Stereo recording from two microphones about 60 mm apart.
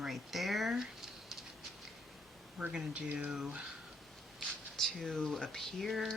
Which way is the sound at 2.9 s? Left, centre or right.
Right.